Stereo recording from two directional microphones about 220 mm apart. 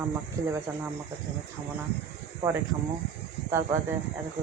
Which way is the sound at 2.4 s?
15° right (ahead or behind).